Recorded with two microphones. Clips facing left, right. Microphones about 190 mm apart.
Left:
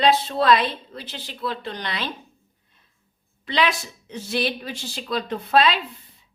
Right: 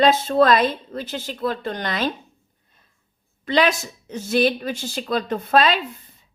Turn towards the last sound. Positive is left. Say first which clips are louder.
# right 1 dB
turn(degrees=-45)  # may be behind; listen again after turning